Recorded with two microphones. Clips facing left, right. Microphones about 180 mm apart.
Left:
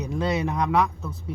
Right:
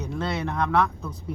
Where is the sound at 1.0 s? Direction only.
5° left (ahead or behind).